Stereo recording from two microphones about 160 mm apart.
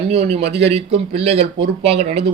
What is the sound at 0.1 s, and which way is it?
Speech, 40° right (ahead or behind).